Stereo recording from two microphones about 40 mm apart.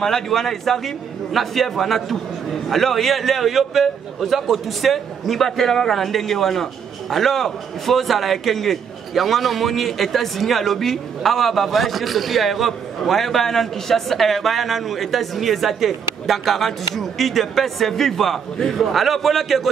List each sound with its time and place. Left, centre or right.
0.0 s a man's voice: centre